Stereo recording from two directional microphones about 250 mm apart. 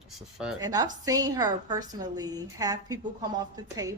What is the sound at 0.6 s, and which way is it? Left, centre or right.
Speech, centre.